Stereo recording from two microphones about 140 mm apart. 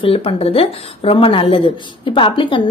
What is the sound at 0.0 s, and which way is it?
A woman's voice, 40° left (ahead or behind).